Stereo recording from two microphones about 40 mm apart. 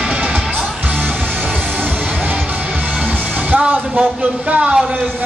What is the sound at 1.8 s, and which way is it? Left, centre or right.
Music, right.